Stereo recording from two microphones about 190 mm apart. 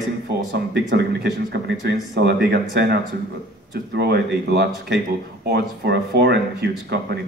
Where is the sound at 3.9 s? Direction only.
60° right (ahead or behind).